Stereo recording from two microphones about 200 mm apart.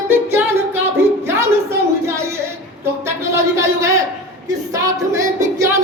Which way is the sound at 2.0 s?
15° right (ahead or behind).